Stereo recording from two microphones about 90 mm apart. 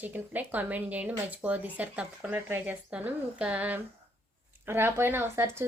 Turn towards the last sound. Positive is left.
turn(degrees=-30)  # may be behind; listen again after turning